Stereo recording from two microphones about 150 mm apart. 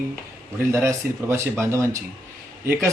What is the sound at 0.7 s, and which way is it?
Speech, 15° right (ahead or behind).